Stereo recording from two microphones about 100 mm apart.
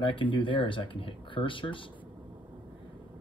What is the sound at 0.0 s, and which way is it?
Speech, 60° left (ahead or behind).